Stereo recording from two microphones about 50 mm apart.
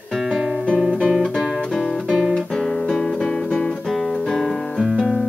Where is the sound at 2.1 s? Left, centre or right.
Centre.